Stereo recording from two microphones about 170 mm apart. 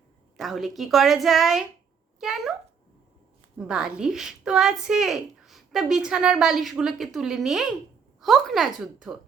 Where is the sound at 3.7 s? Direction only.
5° right (ahead or behind).